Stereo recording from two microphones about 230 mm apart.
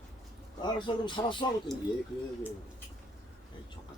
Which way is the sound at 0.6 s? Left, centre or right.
Centre.